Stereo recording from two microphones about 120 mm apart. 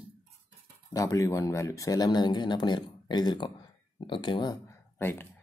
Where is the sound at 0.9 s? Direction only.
30° left (ahead or behind).